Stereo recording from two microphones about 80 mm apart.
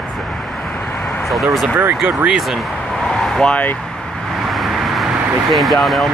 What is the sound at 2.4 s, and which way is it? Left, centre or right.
Vehicle, centre.